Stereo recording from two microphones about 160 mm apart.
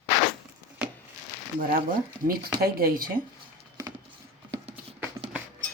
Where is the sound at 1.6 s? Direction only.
65° right (ahead or behind).